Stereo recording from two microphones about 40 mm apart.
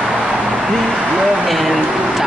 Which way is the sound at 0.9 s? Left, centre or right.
Centre.